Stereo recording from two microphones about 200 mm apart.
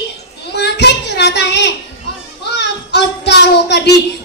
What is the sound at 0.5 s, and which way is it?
Child singing, 60° left (ahead or behind).